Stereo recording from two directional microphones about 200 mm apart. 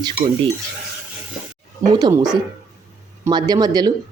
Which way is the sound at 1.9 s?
15° right (ahead or behind).